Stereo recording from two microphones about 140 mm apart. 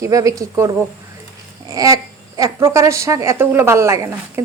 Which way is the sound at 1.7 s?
25° right (ahead or behind).